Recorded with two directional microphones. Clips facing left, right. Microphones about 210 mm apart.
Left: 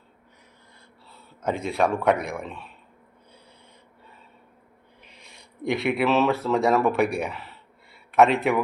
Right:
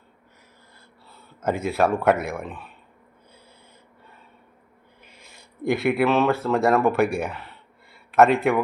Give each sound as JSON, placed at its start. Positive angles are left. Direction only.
{"t": 1.1, "sound": "a sound", "side_deg": -5}
{"t": 2.0, "sound": "speech", "side_deg": -5}
{"t": 5.0, "sound": "speech", "side_deg": 0}